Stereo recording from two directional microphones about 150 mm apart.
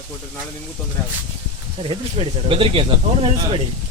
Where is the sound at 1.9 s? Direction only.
40° right (ahead or behind).